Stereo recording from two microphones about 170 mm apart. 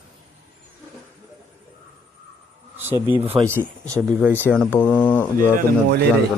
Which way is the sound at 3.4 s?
Centre (ahead or behind).